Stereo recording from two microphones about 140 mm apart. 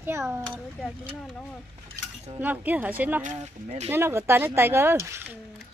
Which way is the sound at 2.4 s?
10° right (ahead or behind).